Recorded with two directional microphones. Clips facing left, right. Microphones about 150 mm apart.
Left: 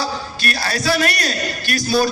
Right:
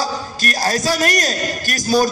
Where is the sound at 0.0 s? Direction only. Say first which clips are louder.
Right 1 dB; 40° right (ahead or behind).